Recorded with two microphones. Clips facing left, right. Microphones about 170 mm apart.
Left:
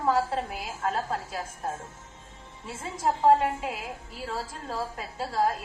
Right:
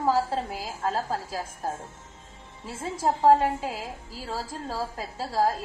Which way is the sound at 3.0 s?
30° right (ahead or behind).